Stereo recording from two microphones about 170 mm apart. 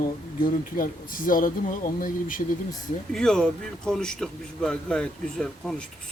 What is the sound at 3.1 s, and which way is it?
A man's voice, 5° left (ahead or behind).